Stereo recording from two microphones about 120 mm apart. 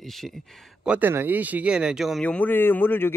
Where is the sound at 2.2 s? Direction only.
10° left (ahead or behind).